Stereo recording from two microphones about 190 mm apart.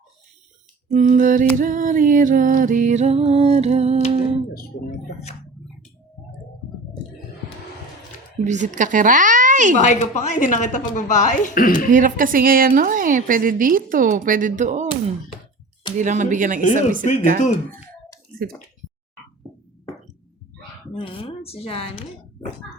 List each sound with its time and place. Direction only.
0.9 s a woman's voice: 40° right (ahead or behind)
4.4 s guitar: 55° left (ahead or behind)
8.4 s a woman's voice: 40° right (ahead or behind)
9.7 s speech: 40° left (ahead or behind)
11.9 s a woman's voice: 45° right (ahead or behind)
19.4 s music: 5° right (ahead or behind)
20.9 s speech: 30° left (ahead or behind)